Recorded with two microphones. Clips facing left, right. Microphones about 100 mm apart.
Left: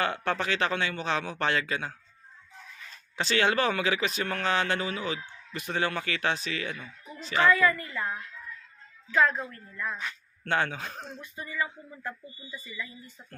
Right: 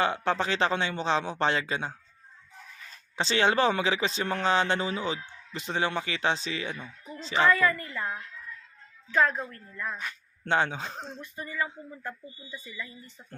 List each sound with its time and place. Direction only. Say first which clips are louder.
0.0 s speech: right 2 dB; 20° right (ahead or behind)
3.2 s a child's voice: right 1 dB; 25° right (ahead or behind)
9.8 s speech: left 1 dB; centre (ahead or behind)
10.4 s speech: right 2 dB; 25° right (ahead or behind)
11.3 s a child's voice: even; 35° right (ahead or behind)